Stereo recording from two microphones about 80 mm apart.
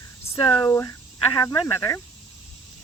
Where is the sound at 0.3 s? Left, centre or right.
Left.